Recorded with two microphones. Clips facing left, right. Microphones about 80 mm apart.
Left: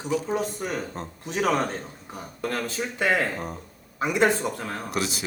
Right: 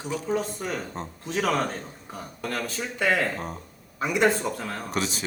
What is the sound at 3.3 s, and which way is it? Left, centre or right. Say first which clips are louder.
Speech: even; centre.